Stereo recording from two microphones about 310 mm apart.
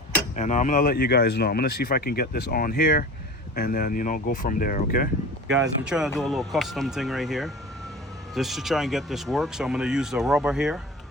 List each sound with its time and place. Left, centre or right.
0.3 s speech: left
5.5 s speech: centre